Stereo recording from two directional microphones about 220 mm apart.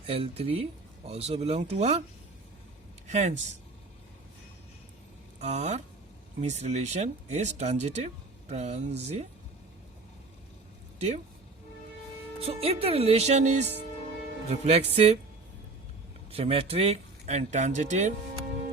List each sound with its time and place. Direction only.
0.0 s speech: 25° right (ahead or behind)
3.1 s speech: 30° right (ahead or behind)
5.4 s speech: 30° right (ahead or behind)
12.4 s speech: 25° right (ahead or behind)
16.3 s speech: 25° right (ahead or behind)